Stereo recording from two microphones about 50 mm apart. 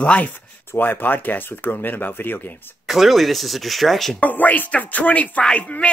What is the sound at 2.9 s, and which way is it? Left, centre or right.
Speech, centre.